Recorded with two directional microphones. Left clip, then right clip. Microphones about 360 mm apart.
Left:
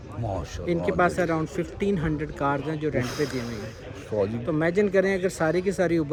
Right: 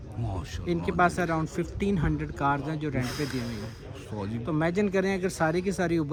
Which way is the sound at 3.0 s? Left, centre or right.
Centre.